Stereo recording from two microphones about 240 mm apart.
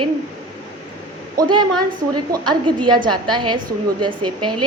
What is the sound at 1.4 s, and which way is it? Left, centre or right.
A woman's voice, centre.